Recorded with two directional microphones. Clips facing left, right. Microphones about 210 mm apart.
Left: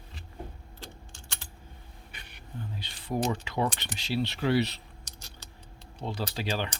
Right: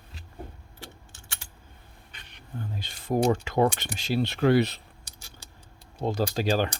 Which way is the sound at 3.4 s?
45° right (ahead or behind).